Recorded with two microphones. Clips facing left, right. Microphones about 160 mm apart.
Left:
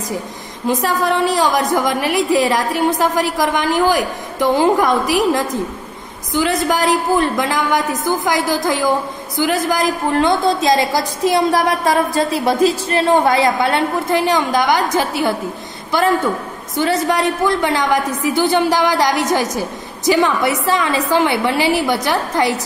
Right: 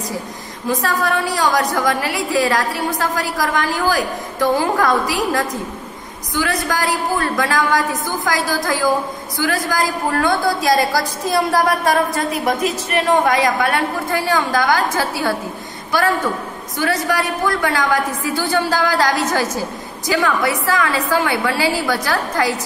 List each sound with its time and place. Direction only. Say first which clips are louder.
0.7 s a woman's voice: left 2 dB; 20° left (ahead or behind)
16.7 s a woman's voice: left 3 dB; 25° left (ahead or behind)